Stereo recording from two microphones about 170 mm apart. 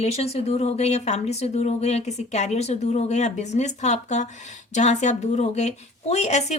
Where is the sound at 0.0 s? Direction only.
35° left (ahead or behind).